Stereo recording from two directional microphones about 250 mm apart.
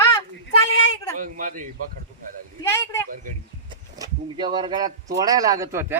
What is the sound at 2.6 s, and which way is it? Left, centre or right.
Speech, centre.